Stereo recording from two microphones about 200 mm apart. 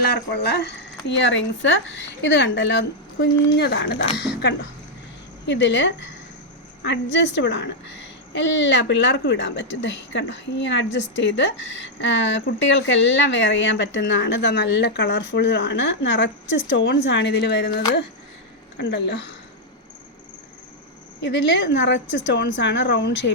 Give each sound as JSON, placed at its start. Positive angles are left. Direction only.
{"t": 0.3, "sound": "a woman's voice", "side_deg": 55}
{"t": 5.5, "sound": "a woman's voice", "side_deg": 60}
{"t": 21.2, "sound": "a woman's voice", "side_deg": 60}